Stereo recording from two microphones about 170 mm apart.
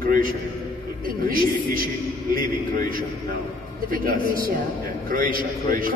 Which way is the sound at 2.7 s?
55° right (ahead or behind).